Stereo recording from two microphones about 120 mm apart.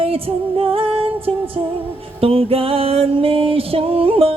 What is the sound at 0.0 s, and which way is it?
Music, 50° right (ahead or behind).